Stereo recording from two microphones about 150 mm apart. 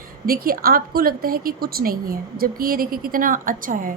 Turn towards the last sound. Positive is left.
turn(degrees=-65)  # may be behind; listen again after turning